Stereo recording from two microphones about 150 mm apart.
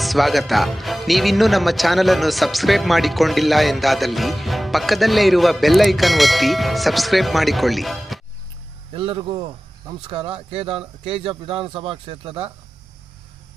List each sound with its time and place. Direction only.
0.0 s speech: centre (ahead or behind)
8.9 s speech: 35° right (ahead or behind)